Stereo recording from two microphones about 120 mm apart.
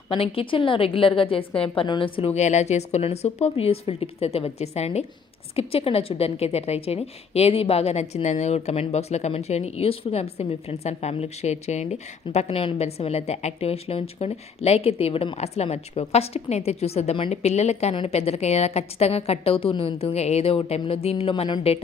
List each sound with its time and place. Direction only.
0.1 s a woman's voice: 50° left (ahead or behind)
2.3 s a woman's voice: 70° left (ahead or behind)
17.9 s a woman's voice: 50° left (ahead or behind)